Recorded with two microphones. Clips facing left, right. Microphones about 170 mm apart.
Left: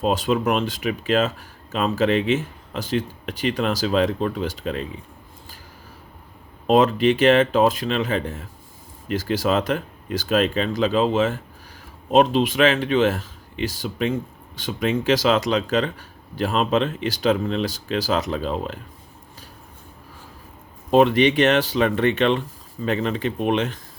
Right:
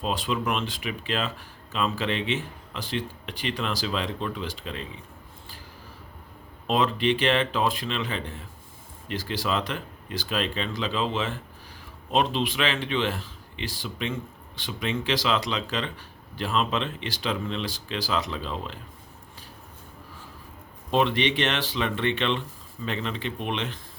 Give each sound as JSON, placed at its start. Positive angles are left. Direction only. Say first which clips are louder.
{"t": 0.0, "sound": "speech", "louder": "left 7 dB", "side_deg": 45}
{"t": 6.7, "sound": "speech", "louder": "left 7 dB", "side_deg": 45}
{"t": 20.9, "sound": "speech", "louder": "left 8 dB", "side_deg": 45}